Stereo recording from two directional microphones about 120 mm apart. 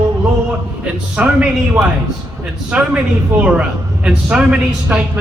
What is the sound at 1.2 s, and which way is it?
A man's voice, 10° right (ahead or behind).